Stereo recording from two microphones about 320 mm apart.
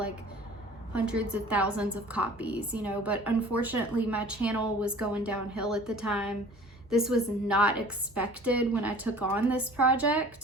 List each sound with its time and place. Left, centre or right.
0.9 s a woman's voice: centre